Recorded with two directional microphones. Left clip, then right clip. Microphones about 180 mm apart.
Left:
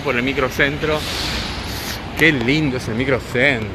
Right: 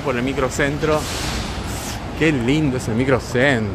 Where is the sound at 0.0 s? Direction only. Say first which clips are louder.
Left 2 dB; 5° right (ahead or behind).